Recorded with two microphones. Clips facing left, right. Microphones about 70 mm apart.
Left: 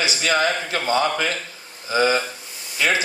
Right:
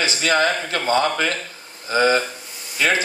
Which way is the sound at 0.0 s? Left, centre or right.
Right.